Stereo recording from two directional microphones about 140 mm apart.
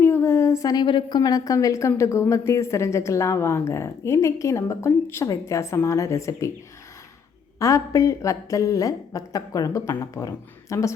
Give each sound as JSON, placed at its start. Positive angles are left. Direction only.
{"t": 0.0, "sound": "a woman's voice", "side_deg": 15}
{"t": 7.6, "sound": "a woman's voice", "side_deg": 20}